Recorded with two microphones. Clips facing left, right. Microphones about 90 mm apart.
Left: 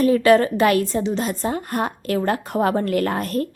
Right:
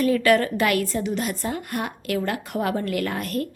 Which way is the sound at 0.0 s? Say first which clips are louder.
Left 4 dB; 25° left (ahead or behind).